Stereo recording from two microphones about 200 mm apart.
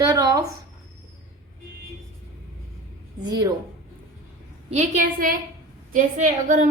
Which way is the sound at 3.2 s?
20° right (ahead or behind).